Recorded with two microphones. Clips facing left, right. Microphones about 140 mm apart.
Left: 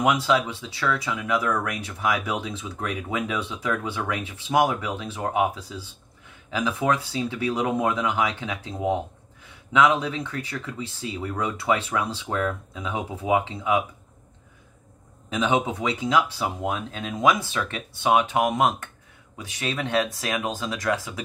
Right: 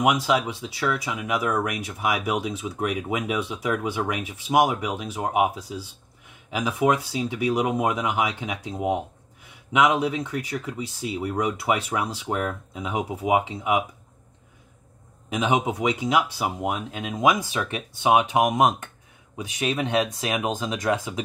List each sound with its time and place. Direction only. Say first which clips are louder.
0.0 s speech: even; 15° right (ahead or behind)
15.2 s speech: even; 15° right (ahead or behind)